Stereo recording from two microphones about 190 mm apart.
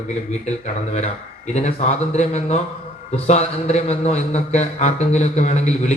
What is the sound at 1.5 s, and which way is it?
A man's voice, 35° left (ahead or behind).